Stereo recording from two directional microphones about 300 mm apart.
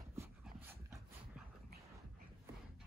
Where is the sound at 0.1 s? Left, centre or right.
Centre.